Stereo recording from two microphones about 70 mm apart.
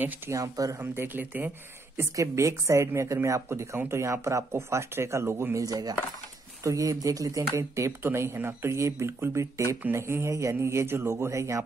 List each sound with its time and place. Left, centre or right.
0.3 s speech: right
0.7 s speech: right
2.1 s speech: right
5.6 s speech: right
6.6 s speech: right
7.5 s speech: right